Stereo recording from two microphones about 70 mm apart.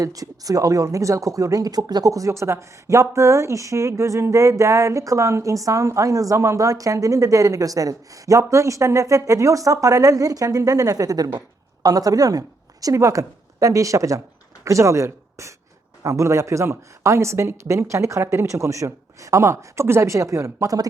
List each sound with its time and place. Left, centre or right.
0.0 s a woman's voice: right